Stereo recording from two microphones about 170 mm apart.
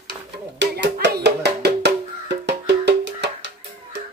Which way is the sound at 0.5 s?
90° right.